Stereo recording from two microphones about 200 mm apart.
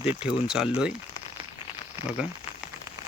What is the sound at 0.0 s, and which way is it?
Speech, 5° right (ahead or behind).